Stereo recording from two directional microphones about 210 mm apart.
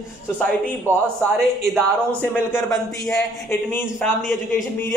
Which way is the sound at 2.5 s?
10° left (ahead or behind).